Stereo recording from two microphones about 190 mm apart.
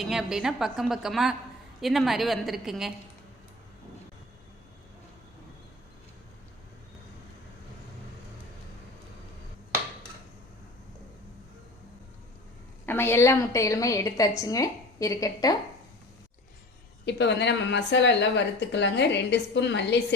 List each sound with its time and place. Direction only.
0.0 s a woman's voice: centre (ahead or behind)
12.8 s a woman's voice: 10° left (ahead or behind)
17.1 s a woman's voice: 65° left (ahead or behind)